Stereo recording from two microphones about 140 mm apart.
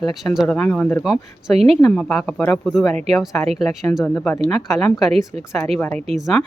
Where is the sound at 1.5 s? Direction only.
45° right (ahead or behind).